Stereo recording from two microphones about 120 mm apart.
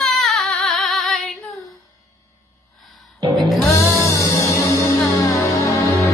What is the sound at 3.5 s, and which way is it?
Music, centre (ahead or behind).